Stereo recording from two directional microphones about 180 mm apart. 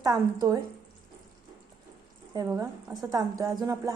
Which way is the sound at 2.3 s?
20° right (ahead or behind).